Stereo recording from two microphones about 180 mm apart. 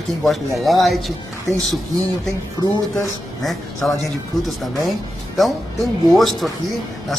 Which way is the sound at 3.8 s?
Centre (ahead or behind).